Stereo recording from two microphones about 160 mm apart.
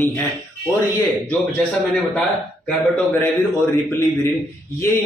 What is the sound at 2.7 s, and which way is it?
A man's voice, 10° left (ahead or behind).